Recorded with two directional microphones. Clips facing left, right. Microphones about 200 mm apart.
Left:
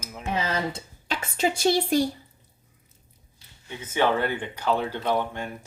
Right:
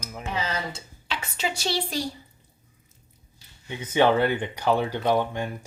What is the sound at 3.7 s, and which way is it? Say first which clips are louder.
Speech: right 3 dB; 15° right (ahead or behind).